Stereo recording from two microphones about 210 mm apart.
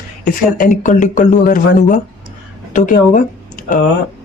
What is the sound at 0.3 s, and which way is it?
Speech, 40° left (ahead or behind).